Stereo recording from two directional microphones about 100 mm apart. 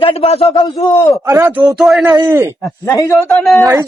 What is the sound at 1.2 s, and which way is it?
Speech, 35° right (ahead or behind).